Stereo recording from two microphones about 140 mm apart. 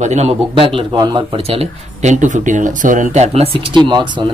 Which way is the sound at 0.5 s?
40° right (ahead or behind).